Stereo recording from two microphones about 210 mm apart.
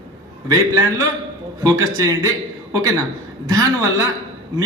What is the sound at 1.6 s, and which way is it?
Speech, 15° right (ahead or behind).